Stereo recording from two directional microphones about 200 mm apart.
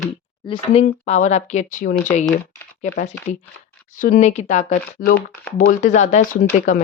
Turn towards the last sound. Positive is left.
turn(degrees=40)  # may be behind; listen again after turning